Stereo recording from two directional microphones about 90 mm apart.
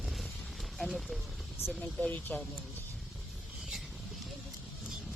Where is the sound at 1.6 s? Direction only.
20° left (ahead or behind).